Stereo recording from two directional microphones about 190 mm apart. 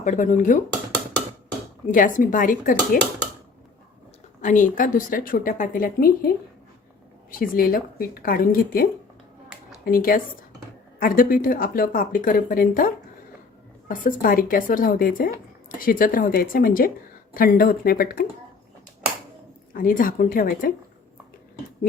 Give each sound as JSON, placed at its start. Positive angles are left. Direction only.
{"t": 0.0, "sound": "speech", "side_deg": 40}
{"t": 1.9, "sound": "a woman's voice", "side_deg": 45}
{"t": 4.4, "sound": "a woman's voice", "side_deg": 40}
{"t": 19.8, "sound": "a woman's voice", "side_deg": 45}